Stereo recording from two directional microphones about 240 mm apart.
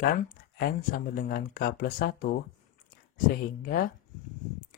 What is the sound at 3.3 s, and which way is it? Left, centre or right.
Speech, left.